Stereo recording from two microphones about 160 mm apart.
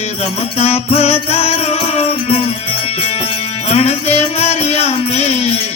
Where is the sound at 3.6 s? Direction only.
40° left (ahead or behind).